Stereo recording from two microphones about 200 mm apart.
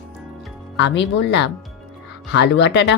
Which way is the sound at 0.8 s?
60° left (ahead or behind).